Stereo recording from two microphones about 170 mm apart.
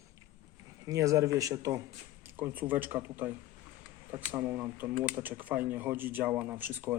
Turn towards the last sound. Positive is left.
turn(degrees=-10)  # may be behind; listen again after turning